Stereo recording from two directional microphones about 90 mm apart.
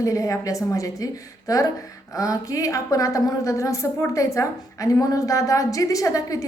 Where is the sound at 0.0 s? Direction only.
35° left (ahead or behind).